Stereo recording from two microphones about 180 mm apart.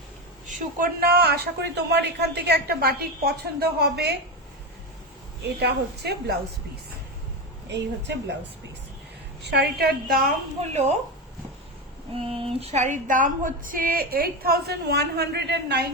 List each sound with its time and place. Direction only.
0.4 s female singing: 50° right (ahead or behind)
5.4 s female singing: 65° right (ahead or behind)
7.7 s speech: 75° right (ahead or behind)
9.4 s female singing: 65° right (ahead or behind)
12.1 s female singing: 30° right (ahead or behind); by 15.9 s 70° right (ahead or behind)